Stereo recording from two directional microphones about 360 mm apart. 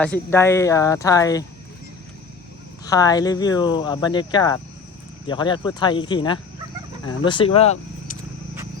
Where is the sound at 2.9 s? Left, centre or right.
Centre.